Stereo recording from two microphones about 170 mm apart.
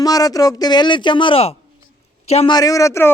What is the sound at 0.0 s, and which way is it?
A man's voice, 20° left (ahead or behind).